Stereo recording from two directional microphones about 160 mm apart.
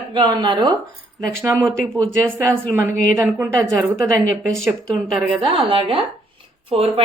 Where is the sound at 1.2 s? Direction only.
5° left (ahead or behind).